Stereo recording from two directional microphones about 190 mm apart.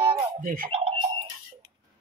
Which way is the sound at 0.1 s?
45° right (ahead or behind).